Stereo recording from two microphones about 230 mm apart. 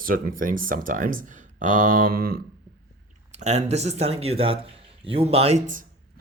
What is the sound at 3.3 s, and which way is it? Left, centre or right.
Speech, right.